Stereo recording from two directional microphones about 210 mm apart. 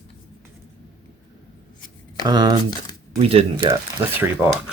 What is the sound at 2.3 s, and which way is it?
Speech, 20° right (ahead or behind).